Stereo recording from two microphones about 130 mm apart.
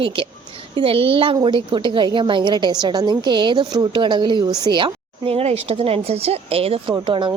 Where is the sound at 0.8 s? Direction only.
45° right (ahead or behind).